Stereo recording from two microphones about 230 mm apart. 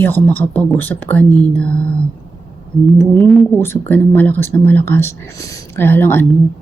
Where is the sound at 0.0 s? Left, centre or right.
Centre.